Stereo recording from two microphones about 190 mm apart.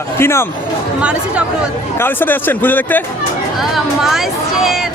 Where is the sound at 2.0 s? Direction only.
10° left (ahead or behind).